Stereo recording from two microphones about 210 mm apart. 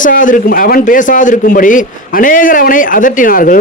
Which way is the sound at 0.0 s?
40° left (ahead or behind).